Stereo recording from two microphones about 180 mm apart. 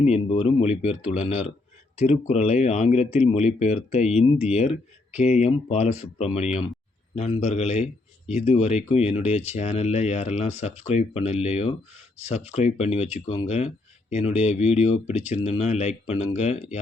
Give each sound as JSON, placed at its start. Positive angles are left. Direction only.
{"t": 0.0, "sound": "speech", "side_deg": 35}